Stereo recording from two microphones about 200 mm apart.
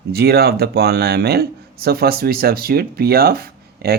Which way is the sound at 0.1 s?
50° right (ahead or behind).